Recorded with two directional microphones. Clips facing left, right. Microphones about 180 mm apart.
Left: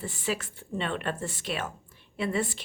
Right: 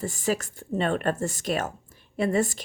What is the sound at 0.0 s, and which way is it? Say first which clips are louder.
A woman's voice: right 5 dB; 40° right (ahead or behind).